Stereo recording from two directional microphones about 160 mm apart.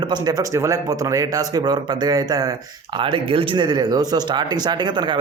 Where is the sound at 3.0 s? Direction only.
35° right (ahead or behind).